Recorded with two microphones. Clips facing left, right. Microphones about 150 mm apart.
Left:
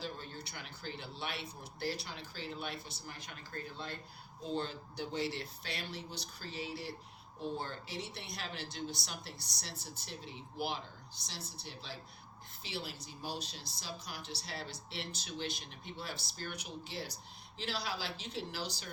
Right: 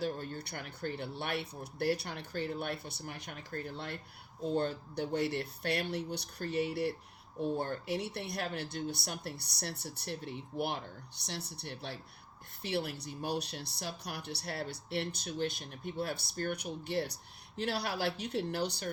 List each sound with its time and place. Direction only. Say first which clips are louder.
0.0 s speech: right 7 dB; 60° right (ahead or behind)
4.5 s speech: right 5 dB; 55° right (ahead or behind)